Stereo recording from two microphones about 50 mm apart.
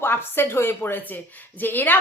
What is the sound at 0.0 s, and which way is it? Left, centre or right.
A woman's voice, left.